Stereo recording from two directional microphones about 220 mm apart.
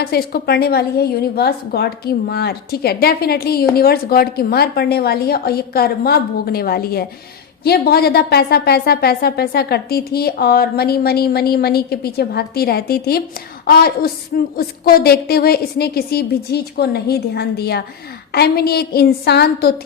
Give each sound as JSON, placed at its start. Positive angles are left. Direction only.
{"t": 0.0, "sound": "a woman's voice", "side_deg": 45}